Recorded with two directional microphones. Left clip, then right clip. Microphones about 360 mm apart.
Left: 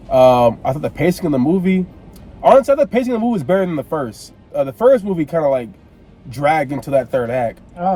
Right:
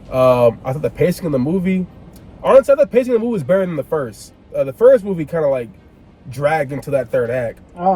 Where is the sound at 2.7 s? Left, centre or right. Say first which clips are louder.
Right 2 dB; centre.